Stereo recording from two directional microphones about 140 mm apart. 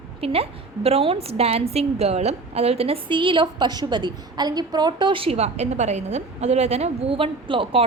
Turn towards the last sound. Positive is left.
turn(degrees=-40)  # may be behind; listen again after turning